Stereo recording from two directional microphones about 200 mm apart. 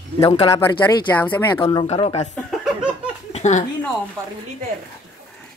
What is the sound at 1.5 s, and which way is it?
Speech, 25° left (ahead or behind).